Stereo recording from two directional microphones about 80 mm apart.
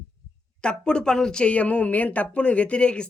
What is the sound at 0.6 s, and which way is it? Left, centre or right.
Speech, centre.